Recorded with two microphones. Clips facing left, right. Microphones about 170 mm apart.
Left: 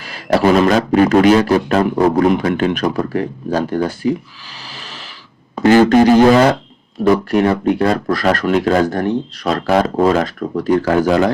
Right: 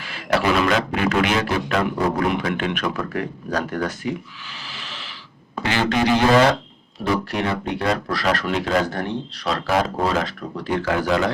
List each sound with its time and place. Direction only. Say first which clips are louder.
0.0 s a man's voice: left 7 dB; 40° left (ahead or behind)
4.5 s a sound: left 4 dB; 40° left (ahead or behind)
5.6 s speech: left 11 dB; 45° left (ahead or behind)